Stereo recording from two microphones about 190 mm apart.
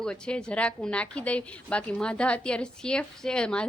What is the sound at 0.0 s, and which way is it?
Speech, 5° left (ahead or behind).